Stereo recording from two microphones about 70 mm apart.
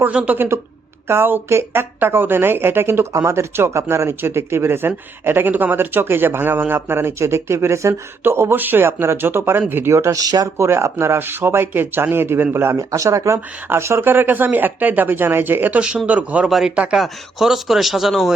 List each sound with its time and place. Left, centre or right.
0.1 s a woman's voice: centre
0.3 s speech: right
10.2 s speech: right
10.6 s speech: right
12.7 s speech: right; by 16.5 s centre
16.5 s speech: centre
16.7 s speech: centre
17.0 s speech: centre